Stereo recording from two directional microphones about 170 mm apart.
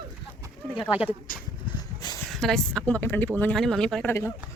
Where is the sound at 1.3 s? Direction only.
55° left (ahead or behind).